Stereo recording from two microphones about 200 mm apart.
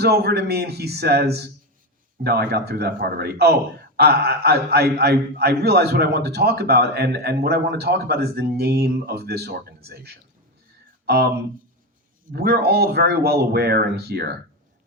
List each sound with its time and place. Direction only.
0.0 s a man's voice: 55° right (ahead or behind)
11.0 s a sound: 50° right (ahead or behind)
12.3 s a man's voice: 50° right (ahead or behind)